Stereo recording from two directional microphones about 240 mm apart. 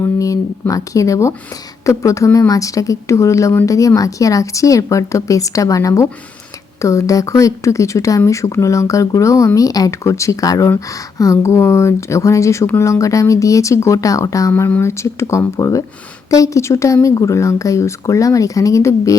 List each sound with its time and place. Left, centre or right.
0.0 s speech: centre